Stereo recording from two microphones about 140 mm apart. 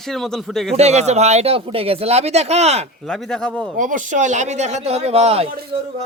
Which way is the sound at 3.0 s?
5° left (ahead or behind).